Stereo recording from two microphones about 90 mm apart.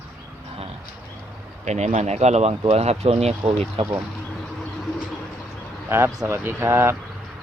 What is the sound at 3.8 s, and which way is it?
Speech, 90° right.